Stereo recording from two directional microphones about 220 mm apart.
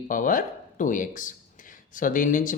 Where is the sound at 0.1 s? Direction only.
35° left (ahead or behind).